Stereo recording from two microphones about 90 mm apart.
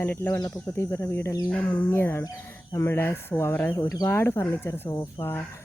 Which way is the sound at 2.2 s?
45° left (ahead or behind).